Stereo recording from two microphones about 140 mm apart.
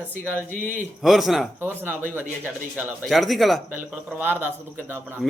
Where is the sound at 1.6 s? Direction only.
15° right (ahead or behind).